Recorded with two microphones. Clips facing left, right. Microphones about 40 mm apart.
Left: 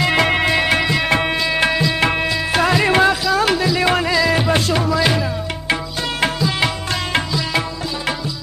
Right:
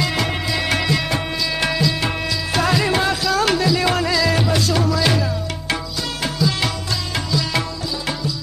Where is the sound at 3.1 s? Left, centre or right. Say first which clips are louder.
Left 2 dB; centre.